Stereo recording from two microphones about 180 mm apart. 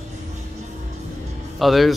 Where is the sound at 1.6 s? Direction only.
Centre (ahead or behind).